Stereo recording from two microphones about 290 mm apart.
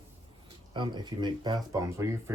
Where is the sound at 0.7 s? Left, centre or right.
Centre.